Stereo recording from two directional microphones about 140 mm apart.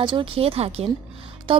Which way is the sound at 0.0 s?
35° right (ahead or behind).